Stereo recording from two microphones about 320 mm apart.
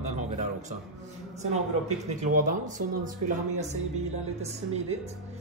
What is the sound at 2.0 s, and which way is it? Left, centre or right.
A man's voice, right.